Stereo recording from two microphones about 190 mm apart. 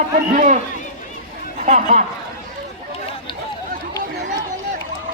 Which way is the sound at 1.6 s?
45° right (ahead or behind).